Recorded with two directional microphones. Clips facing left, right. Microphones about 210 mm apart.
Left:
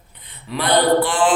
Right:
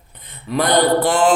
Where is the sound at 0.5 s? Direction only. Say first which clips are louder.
Right 1 dB; 45° right (ahead or behind).